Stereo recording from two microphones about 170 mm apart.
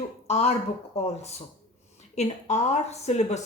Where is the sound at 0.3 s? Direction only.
40° left (ahead or behind).